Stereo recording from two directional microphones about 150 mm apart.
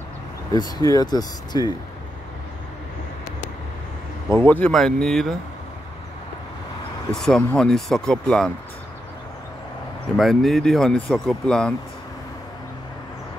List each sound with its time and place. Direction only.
0.5 s speech: 25° left (ahead or behind)
4.5 s speech: 10° left (ahead or behind)
7.1 s speech: 5° left (ahead or behind)
10.1 s speech: centre (ahead or behind)